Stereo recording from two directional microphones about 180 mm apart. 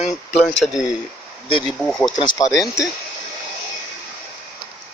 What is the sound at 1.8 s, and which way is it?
Speech, 5° left (ahead or behind).